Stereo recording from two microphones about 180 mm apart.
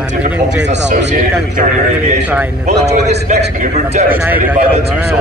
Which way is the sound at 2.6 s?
40° right (ahead or behind).